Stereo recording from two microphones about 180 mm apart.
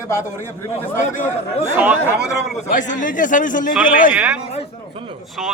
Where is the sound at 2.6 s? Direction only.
45° left (ahead or behind).